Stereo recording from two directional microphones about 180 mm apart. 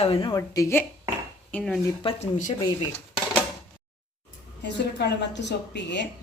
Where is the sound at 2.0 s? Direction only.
40° left (ahead or behind).